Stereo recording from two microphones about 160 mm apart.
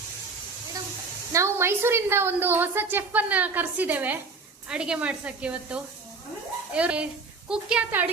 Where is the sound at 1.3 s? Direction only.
15° right (ahead or behind).